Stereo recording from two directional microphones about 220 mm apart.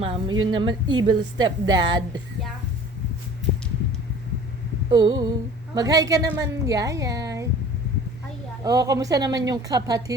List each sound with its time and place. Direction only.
0.0 s a woman's voice: 25° right (ahead or behind)
4.9 s a woman's voice: 20° right (ahead or behind)
8.6 s a woman's voice: 15° right (ahead or behind)